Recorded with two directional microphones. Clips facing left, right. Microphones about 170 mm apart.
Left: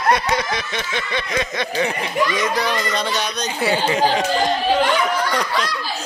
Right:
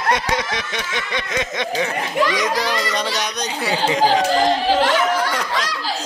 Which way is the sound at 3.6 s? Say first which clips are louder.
Left 1 dB; centre (ahead or behind).